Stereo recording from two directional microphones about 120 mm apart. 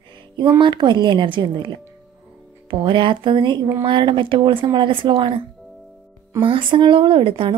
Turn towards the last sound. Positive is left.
turn(degrees=-45)  # may be behind; listen again after turning